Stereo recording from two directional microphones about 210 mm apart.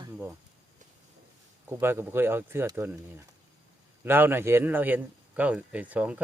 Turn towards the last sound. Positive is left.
turn(degrees=-5)  # may be behind; listen again after turning